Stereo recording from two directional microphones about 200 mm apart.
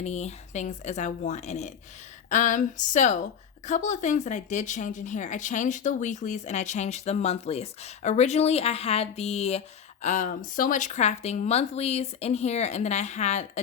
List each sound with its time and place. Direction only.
0.0 s speech: 35° left (ahead or behind)